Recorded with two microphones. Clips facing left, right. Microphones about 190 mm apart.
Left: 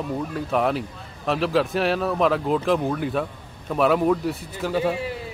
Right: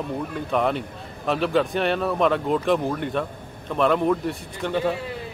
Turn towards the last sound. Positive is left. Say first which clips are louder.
# left 1 dB
turn(degrees=5)  # may be behind; listen again after turning